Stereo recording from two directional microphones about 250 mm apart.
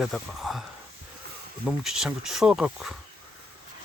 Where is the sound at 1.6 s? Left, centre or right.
Centre.